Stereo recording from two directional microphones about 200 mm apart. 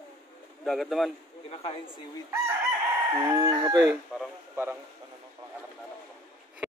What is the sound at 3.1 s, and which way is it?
Speech, 15° right (ahead or behind).